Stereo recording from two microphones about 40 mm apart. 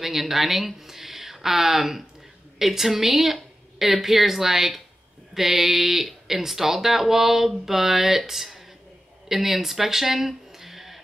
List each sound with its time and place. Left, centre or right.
0.0 s speech: centre